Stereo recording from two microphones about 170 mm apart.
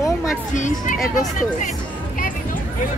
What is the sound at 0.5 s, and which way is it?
Speech, 45° left (ahead or behind).